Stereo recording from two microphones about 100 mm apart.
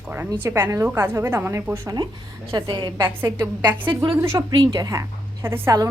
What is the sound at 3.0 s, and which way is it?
Speech, 20° right (ahead or behind).